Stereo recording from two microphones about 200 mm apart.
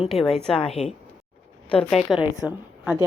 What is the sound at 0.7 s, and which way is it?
Speech, 30° left (ahead or behind).